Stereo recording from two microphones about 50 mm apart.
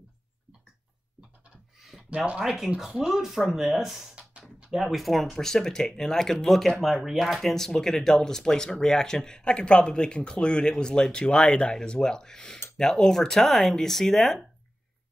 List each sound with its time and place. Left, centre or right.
2.0 s speech: right
2.3 s speech: centre
4.1 s a sound: right
4.7 s speech: centre